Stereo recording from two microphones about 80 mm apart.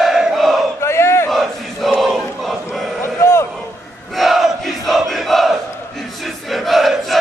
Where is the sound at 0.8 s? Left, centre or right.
Left.